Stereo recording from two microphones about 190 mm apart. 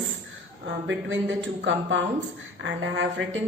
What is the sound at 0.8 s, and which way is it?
A woman's voice, 75° right (ahead or behind).